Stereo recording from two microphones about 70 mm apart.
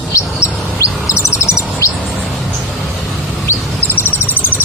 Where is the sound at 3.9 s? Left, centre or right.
Left.